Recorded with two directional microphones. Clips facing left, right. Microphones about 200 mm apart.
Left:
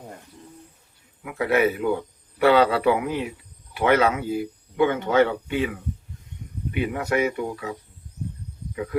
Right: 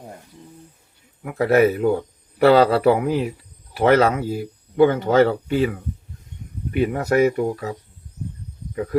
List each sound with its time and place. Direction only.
1.2 s a man's voice: 40° right (ahead or behind)